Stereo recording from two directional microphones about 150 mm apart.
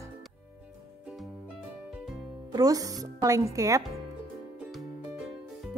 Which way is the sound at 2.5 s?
25° right (ahead or behind).